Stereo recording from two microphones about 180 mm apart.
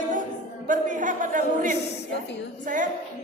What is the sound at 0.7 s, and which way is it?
A woman's voice, 45° right (ahead or behind).